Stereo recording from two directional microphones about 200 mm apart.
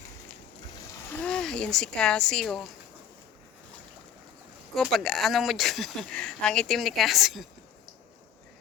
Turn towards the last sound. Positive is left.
turn(degrees=0)  # may be behind; listen again after turning